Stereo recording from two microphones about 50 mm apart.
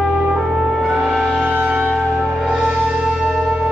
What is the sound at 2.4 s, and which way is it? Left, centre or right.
Music, centre.